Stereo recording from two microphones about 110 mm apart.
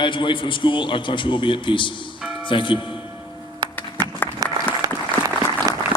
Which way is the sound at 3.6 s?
35° right (ahead or behind).